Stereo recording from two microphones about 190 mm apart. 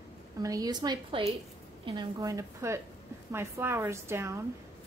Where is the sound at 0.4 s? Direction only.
20° right (ahead or behind).